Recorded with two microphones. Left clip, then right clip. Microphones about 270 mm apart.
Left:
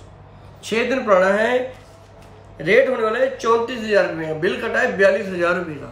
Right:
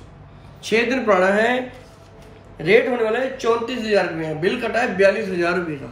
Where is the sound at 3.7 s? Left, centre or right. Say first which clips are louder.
Left 1 dB; centre.